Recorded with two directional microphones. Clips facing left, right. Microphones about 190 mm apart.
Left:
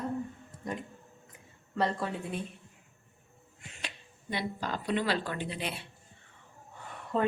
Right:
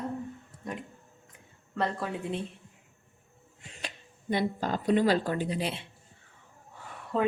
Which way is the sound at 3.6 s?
35° right (ahead or behind).